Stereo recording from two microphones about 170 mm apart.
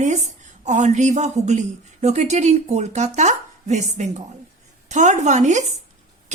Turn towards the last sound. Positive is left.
turn(degrees=-45)  # may be behind; listen again after turning